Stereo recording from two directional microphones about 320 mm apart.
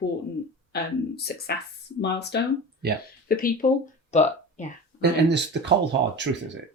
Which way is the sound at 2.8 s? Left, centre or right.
Right.